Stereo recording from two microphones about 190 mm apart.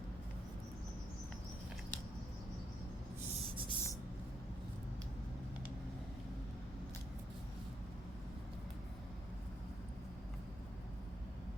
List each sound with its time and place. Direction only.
3.5 s spray: 25° right (ahead or behind)